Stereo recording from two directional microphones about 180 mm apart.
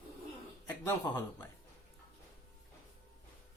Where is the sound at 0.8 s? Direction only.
10° left (ahead or behind).